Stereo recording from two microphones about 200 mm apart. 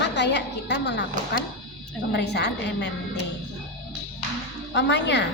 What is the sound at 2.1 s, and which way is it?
Speech, 60° left (ahead or behind).